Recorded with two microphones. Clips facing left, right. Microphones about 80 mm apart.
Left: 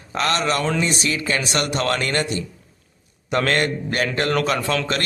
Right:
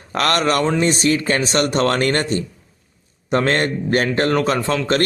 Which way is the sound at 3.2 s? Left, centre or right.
Right.